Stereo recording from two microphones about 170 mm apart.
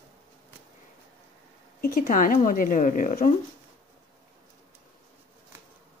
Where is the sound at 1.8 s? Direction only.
55° left (ahead or behind).